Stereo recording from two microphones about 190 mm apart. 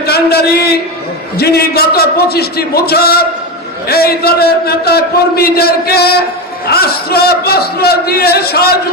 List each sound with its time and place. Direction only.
0.0 s a man's voice: 55° left (ahead or behind)